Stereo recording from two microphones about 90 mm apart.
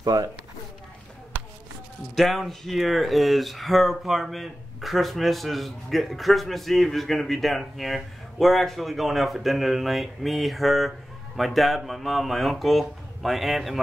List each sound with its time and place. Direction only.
0.0 s speech: 45° right (ahead or behind)
2.1 s speech: centre (ahead or behind)